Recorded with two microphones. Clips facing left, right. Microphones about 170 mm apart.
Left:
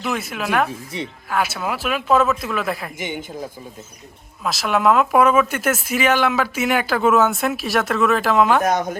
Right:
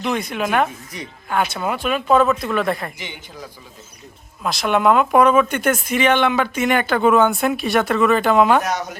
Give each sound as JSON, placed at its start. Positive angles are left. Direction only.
{"t": 0.0, "sound": "speech", "side_deg": 5}
{"t": 0.9, "sound": "speech", "side_deg": 30}
{"t": 1.3, "sound": "speech", "side_deg": 5}
{"t": 3.0, "sound": "speech", "side_deg": 50}
{"t": 4.4, "sound": "speech", "side_deg": 0}
{"t": 8.6, "sound": "speech", "side_deg": 50}